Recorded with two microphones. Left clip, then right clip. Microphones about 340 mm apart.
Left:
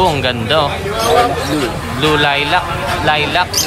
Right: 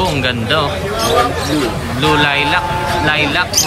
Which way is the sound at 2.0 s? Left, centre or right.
Centre.